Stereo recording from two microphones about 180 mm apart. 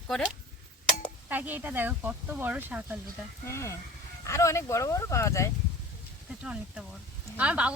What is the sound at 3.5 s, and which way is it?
Speech, 15° left (ahead or behind).